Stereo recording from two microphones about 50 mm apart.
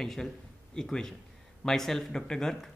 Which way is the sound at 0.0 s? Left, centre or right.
Centre.